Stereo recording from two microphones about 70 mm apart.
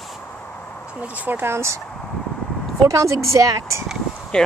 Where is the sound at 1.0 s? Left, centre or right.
Right.